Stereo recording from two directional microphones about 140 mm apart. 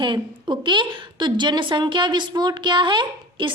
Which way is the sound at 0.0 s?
35° right (ahead or behind).